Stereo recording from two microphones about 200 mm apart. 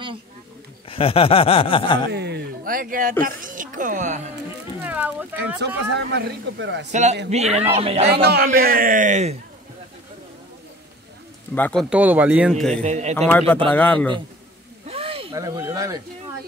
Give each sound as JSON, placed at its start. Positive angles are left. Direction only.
{"t": 0.8, "sound": "speech", "side_deg": 30}
{"t": 2.0, "sound": "speech", "side_deg": -55}
{"t": 4.8, "sound": "speech", "side_deg": -5}
{"t": 5.9, "sound": "speech", "side_deg": -60}
{"t": 6.9, "sound": "speech", "side_deg": -35}
{"t": 8.1, "sound": "speech", "side_deg": -55}
{"t": 11.5, "sound": "a man's voice", "side_deg": 5}
{"t": 12.8, "sound": "speech", "side_deg": -35}
{"t": 13.3, "sound": "a man's voice", "side_deg": 10}
{"t": 14.9, "sound": "a sound", "side_deg": -30}